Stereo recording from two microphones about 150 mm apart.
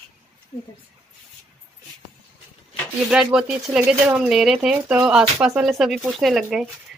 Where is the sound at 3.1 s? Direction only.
5° right (ahead or behind).